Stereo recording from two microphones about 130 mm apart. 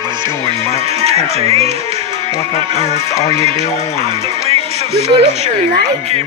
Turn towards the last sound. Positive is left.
turn(degrees=-55)  # may be behind; listen again after turning